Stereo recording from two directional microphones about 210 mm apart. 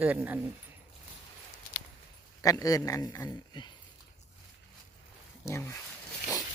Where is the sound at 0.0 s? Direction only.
10° right (ahead or behind).